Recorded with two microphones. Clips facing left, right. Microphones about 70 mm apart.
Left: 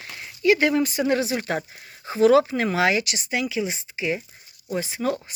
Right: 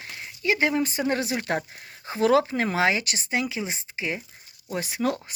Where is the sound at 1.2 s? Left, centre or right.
Right.